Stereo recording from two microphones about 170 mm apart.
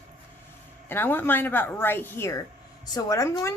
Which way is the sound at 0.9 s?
10° left (ahead or behind).